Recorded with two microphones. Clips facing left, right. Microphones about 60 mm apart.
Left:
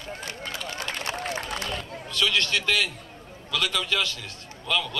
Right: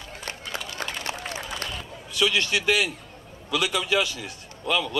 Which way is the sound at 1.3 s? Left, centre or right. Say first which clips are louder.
Left 2 dB; left.